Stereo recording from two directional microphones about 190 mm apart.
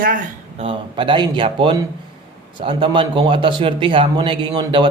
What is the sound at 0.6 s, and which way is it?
A man's voice, 25° right (ahead or behind).